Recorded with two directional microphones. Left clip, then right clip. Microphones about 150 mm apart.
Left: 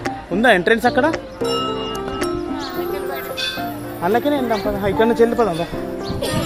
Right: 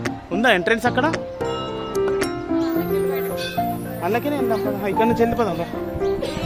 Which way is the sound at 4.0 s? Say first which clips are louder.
Left 5 dB; 10° right (ahead or behind).